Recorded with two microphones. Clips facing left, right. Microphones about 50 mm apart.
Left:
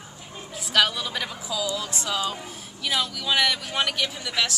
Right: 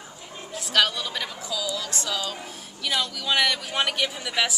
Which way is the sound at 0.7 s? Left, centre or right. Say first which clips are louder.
Left 1 dB; centre.